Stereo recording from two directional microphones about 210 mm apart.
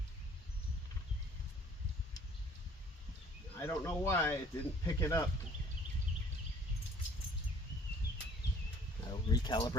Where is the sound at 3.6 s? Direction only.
10° left (ahead or behind).